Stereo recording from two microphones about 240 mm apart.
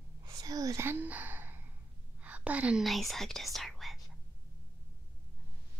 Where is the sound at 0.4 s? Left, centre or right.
Centre.